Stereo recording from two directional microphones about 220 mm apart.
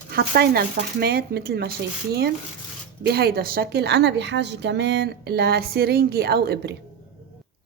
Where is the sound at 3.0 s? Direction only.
45° right (ahead or behind).